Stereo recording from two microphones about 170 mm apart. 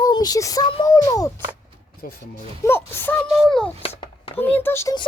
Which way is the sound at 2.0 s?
60° left (ahead or behind).